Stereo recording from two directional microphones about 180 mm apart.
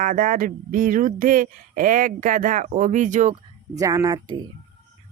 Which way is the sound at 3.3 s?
20° right (ahead or behind).